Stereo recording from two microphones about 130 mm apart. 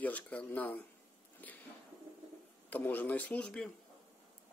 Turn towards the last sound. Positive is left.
turn(degrees=10)  # may be behind; listen again after turning